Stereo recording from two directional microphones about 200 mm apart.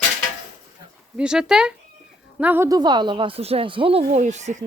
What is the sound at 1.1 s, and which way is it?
Speech, 5° right (ahead or behind).